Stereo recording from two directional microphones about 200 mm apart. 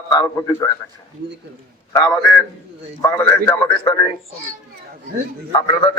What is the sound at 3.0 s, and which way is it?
Speech, 15° left (ahead or behind).